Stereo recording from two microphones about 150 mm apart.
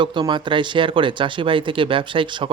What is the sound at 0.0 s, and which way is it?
A man's voice, 30° right (ahead or behind).